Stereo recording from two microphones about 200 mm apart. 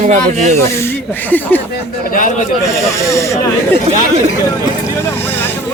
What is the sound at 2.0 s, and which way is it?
Speech, 45° left (ahead or behind).